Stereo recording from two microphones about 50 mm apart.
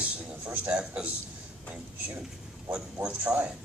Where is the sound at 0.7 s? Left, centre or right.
Right.